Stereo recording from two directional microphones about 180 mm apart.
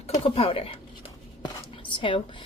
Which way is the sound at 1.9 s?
30° left (ahead or behind).